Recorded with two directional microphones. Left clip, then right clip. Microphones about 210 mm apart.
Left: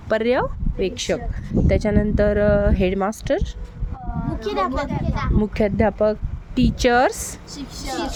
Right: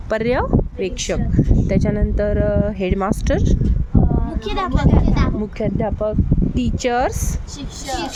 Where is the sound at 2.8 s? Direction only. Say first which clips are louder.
Right 1 dB; centre (ahead or behind).